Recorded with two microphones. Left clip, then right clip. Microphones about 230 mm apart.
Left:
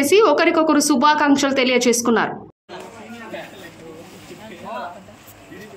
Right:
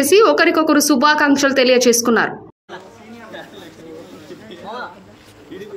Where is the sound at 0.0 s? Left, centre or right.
Centre.